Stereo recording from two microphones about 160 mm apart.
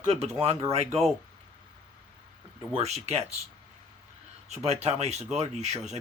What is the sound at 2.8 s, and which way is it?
Speech, 40° right (ahead or behind).